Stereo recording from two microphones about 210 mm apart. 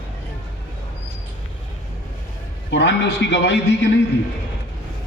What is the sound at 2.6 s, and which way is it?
Speech, 55° left (ahead or behind).